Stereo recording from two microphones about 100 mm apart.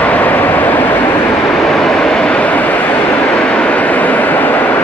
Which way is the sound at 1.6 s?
5° left (ahead or behind).